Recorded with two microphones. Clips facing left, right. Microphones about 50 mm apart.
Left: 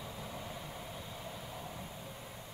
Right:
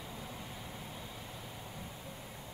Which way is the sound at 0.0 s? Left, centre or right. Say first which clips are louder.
Left 1 dB; centre.